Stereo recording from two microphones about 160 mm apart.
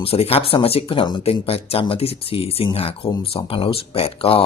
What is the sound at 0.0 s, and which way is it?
Speech, 35° left (ahead or behind).